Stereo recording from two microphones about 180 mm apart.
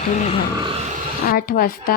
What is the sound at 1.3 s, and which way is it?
Speech, 55° left (ahead or behind).